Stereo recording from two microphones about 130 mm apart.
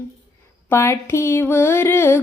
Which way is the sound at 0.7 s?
20° left (ahead or behind).